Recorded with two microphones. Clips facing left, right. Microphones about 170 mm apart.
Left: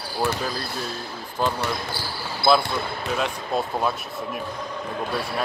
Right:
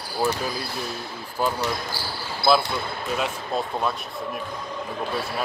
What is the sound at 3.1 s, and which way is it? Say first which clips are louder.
Speech: left 1 dB; centre (ahead or behind).